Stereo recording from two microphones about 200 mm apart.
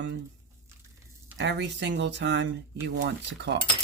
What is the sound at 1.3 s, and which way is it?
Speech, 60° right (ahead or behind).